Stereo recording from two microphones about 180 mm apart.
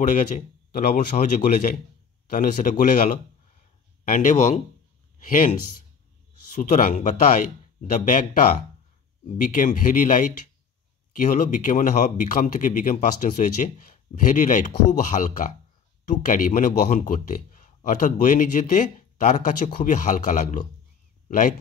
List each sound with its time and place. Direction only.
0.7 s a man's voice: 55° left (ahead or behind)